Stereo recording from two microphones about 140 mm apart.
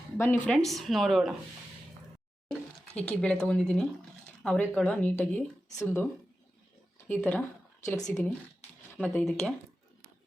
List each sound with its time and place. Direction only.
0.4 s speech: 5° left (ahead or behind)
2.5 s speech: 5° left (ahead or behind)
5.7 s speech: 20° left (ahead or behind)
7.1 s speech: 15° left (ahead or behind)
8.6 s a sound: 50° left (ahead or behind)
9.0 s speech: 5° left (ahead or behind)